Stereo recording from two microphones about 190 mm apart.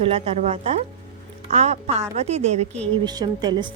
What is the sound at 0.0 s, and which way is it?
Speech, 30° right (ahead or behind).